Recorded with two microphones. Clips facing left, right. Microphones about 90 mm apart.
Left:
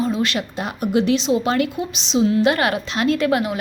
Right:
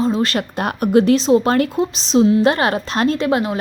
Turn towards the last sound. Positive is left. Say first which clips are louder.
# right 1 dB
turn(degrees=-30)  # may be behind; listen again after turning